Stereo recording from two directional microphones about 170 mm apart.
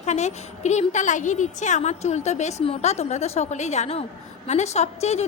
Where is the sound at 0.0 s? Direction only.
40° left (ahead or behind).